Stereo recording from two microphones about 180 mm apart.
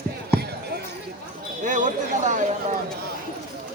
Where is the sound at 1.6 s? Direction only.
45° right (ahead or behind).